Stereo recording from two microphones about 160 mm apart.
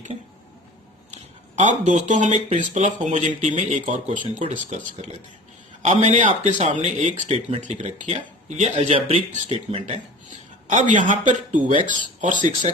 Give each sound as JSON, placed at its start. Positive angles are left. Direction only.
{"t": 1.5, "sound": "speech", "side_deg": -50}